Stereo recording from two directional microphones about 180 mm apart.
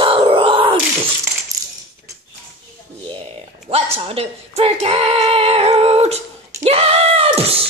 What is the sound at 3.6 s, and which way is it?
Speech, 35° right (ahead or behind).